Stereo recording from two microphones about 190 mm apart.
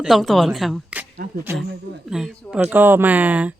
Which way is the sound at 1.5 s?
15° right (ahead or behind).